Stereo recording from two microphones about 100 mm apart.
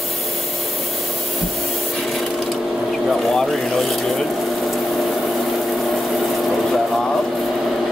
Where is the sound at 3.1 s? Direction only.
5° left (ahead or behind).